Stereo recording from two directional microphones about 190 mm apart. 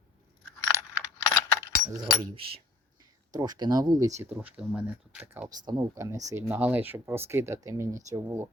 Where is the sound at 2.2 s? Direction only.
30° right (ahead or behind).